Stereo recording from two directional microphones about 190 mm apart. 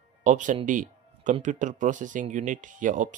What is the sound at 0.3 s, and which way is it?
Speech, 40° right (ahead or behind).